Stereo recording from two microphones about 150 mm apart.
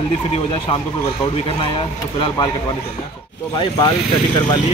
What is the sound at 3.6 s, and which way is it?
Speech, 30° left (ahead or behind).